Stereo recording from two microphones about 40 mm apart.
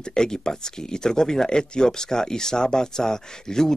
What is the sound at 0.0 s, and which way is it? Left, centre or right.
Speech, centre.